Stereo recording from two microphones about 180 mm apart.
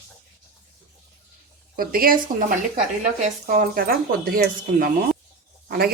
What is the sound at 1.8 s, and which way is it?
Speech, 55° right (ahead or behind).